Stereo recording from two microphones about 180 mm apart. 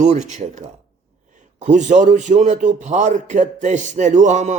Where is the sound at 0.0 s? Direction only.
40° right (ahead or behind).